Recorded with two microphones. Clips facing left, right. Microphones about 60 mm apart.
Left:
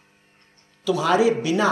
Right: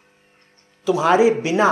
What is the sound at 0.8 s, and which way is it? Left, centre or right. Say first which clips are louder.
Speech: right 4 dB; right.